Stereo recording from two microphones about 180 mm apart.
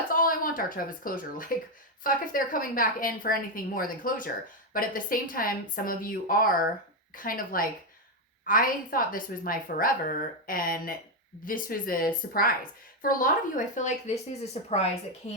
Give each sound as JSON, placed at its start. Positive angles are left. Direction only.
{"t": 0.1, "sound": "a woman's voice", "side_deg": 50}